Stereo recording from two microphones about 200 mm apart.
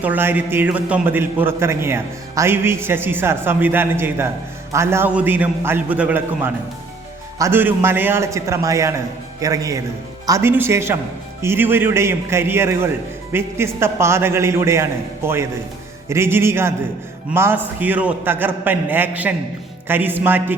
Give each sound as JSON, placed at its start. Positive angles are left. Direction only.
{"t": 0.0, "sound": "a man's voice", "side_deg": -10}